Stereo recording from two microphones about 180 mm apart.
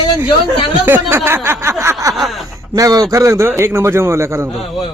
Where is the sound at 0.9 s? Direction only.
10° right (ahead or behind).